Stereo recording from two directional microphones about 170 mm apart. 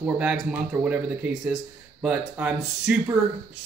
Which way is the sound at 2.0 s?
10° right (ahead or behind).